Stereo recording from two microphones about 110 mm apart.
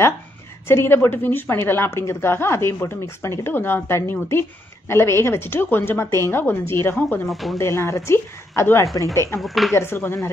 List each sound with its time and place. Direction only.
0.7 s a woman's voice: 20° left (ahead or behind)
7.2 s speech: centre (ahead or behind)
7.5 s a woman's voice: 25° left (ahead or behind)
9.4 s speech: centre (ahead or behind)
9.8 s a woman's voice: 20° left (ahead or behind)